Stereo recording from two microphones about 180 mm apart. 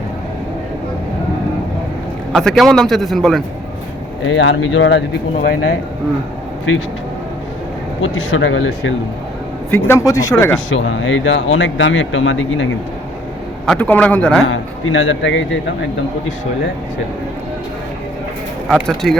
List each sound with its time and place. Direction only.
2.3 s a man's voice: centre (ahead or behind)
4.3 s speech: 90° left; by 5.5 s 75° left (ahead or behind)
8.1 s speech: 90° left
9.6 s speech: 10° left (ahead or behind)
10.7 s speech: 90° left
13.7 s speech: 10° left (ahead or behind)
14.5 s speech: 90° left
18.7 s a man's voice: 5° left (ahead or behind)